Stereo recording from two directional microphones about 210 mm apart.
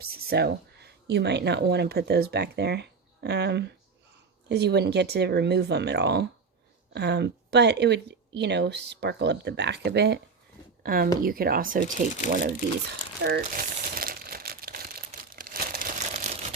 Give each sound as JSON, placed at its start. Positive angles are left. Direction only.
{"t": 0.0, "sound": "speech", "side_deg": -45}
{"t": 13.2, "sound": "crumpling", "side_deg": -50}